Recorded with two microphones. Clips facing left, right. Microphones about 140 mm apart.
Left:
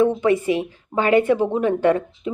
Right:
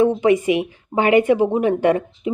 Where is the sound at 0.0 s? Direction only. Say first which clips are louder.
Right 2 dB; 15° right (ahead or behind).